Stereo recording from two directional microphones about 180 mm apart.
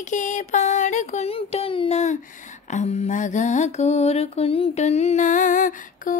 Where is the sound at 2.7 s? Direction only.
40° left (ahead or behind).